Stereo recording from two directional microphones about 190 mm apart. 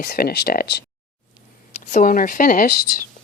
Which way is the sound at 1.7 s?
40° left (ahead or behind).